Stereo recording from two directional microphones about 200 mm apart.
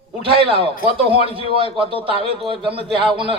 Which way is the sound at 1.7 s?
25° right (ahead or behind).